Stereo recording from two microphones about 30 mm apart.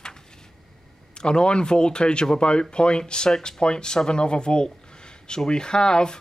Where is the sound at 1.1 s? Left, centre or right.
Left.